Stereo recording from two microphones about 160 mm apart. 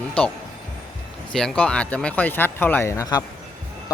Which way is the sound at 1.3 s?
5° left (ahead or behind).